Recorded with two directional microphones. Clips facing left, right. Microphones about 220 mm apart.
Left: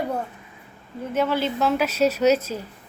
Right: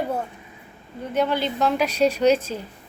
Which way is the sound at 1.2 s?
5° left (ahead or behind).